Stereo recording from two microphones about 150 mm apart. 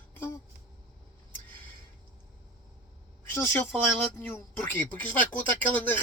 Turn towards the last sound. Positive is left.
turn(degrees=10)  # may be behind; listen again after turning